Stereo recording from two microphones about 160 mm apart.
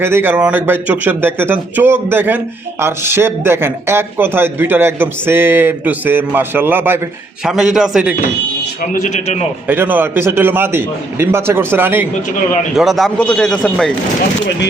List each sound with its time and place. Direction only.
0.0 s a man's voice: 15° right (ahead or behind)
8.9 s a man's voice: 50° left (ahead or behind)
9.6 s a man's voice: 10° right (ahead or behind)
12.7 s speech: centre (ahead or behind)